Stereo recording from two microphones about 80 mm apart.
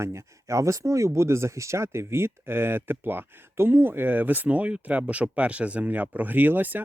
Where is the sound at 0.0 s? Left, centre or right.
Right.